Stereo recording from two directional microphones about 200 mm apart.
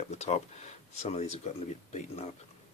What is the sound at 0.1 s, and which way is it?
Speech, 35° left (ahead or behind).